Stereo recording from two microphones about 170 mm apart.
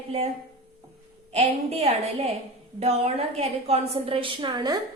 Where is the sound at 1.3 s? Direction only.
40° right (ahead or behind).